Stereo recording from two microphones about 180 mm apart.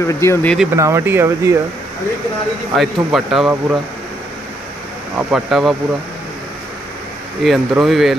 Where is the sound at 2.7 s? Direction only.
Centre (ahead or behind).